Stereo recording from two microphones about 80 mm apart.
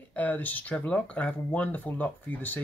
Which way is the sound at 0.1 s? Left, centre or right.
Centre.